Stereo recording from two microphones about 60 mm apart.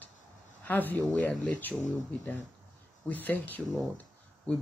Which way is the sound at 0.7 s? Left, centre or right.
Left.